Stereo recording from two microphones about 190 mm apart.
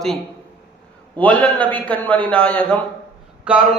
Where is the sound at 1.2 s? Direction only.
10° left (ahead or behind).